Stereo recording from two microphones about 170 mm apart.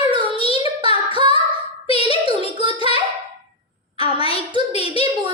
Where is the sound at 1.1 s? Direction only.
30° right (ahead or behind).